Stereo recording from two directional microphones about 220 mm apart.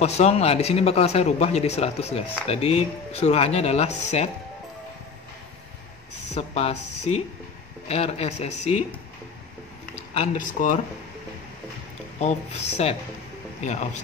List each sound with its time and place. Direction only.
0.0 s speech: 30° left (ahead or behind)
6.3 s speech: 30° left (ahead or behind)
7.9 s speech: 30° left (ahead or behind)
10.1 s speech: 30° left (ahead or behind)
12.2 s speech: 30° left (ahead or behind)